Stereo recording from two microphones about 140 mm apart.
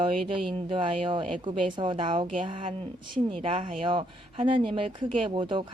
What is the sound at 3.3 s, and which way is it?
A woman's voice, 40° right (ahead or behind).